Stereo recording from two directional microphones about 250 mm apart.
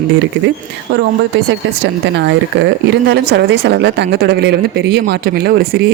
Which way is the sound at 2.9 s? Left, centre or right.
Right.